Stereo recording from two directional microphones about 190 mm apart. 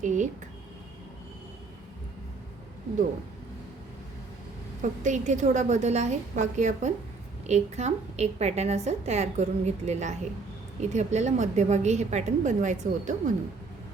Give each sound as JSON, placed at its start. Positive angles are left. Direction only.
{"t": 0.0, "sound": "a woman's voice", "side_deg": -40}
{"t": 4.8, "sound": "a woman's voice", "side_deg": -40}